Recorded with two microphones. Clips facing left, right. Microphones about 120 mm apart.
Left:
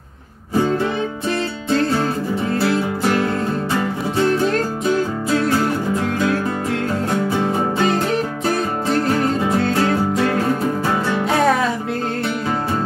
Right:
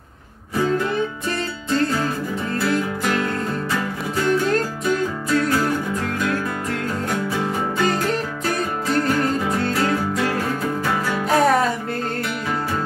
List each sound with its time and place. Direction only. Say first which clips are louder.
2.6 s music: left 1 dB; 30° left (ahead or behind)
7.1 s music: left 4 dB; 30° left (ahead or behind)
11.2 s music: right 1 dB; centre (ahead or behind)